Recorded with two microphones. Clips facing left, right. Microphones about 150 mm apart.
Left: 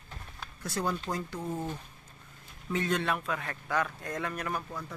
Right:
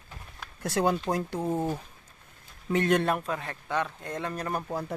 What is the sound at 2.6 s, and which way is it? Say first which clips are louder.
Speech: right 6 dB; 60° right (ahead or behind).